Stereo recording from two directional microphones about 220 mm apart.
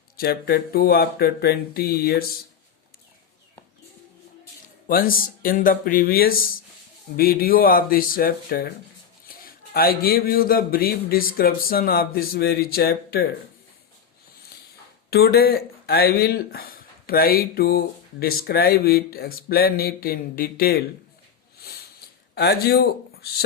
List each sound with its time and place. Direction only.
0.2 s speech: 45° left (ahead or behind)
4.6 s speech: 40° left (ahead or behind)
15.1 s speech: 45° left (ahead or behind)
21.6 s a sound: 45° left (ahead or behind)
22.4 s speech: 45° left (ahead or behind)